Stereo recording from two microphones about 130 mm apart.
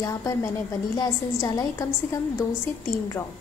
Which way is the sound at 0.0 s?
25° left (ahead or behind).